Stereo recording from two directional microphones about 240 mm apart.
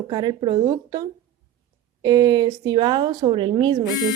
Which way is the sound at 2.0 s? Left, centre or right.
Centre.